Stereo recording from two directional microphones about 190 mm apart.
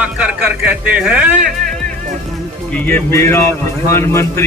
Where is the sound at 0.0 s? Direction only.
5° right (ahead or behind).